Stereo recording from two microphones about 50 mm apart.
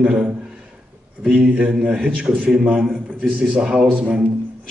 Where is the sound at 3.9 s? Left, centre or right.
Right.